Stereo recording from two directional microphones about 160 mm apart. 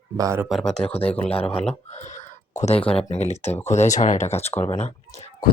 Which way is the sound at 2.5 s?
40° left (ahead or behind).